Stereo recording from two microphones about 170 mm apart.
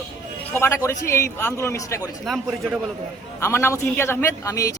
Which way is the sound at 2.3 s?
Centre (ahead or behind).